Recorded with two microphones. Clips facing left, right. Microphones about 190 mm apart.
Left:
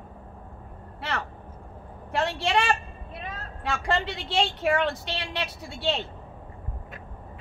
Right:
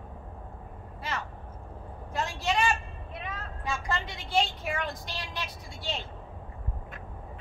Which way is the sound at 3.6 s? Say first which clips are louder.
Left 6 dB; 75° left (ahead or behind).